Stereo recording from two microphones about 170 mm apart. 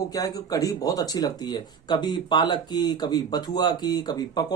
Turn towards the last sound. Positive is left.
turn(degrees=25)  # may be behind; listen again after turning